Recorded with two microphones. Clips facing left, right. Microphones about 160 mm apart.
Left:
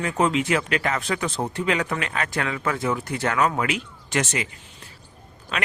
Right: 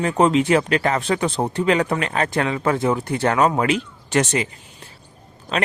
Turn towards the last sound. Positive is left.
turn(degrees=-30)  # may be behind; listen again after turning